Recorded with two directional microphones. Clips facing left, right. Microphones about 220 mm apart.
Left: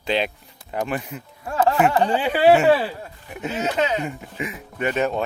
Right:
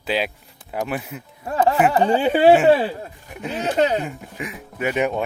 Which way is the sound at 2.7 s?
30° right (ahead or behind).